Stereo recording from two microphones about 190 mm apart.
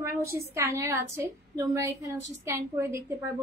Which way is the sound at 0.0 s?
15° right (ahead or behind).